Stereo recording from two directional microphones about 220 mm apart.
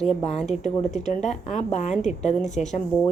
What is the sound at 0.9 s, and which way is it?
Speech, 35° left (ahead or behind).